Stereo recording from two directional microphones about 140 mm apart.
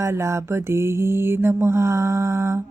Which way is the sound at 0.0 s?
20° right (ahead or behind).